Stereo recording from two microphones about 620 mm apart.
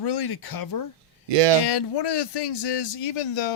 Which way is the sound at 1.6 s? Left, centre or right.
Left.